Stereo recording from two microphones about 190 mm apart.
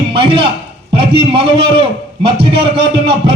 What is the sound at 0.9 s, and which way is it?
Music, 30° right (ahead or behind).